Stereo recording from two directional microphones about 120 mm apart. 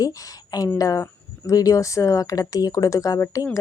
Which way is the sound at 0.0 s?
30° left (ahead or behind).